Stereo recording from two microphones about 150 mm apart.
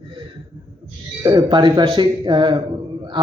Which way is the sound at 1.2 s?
25° right (ahead or behind).